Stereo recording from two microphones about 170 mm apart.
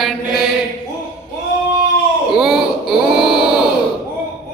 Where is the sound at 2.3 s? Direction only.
Centre (ahead or behind).